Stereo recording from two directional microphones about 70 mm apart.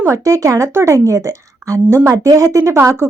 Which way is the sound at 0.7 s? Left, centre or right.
Right.